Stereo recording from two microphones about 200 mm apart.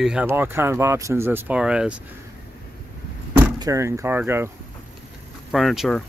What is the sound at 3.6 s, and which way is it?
Speech, 15° right (ahead or behind).